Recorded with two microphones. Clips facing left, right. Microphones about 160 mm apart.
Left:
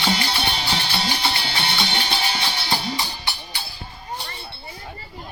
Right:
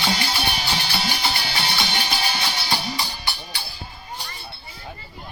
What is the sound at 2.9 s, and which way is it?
Music, 20° left (ahead or behind).